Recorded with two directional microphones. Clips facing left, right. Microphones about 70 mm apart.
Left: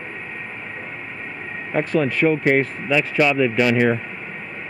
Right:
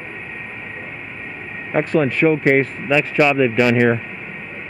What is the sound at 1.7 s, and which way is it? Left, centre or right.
Speech, right.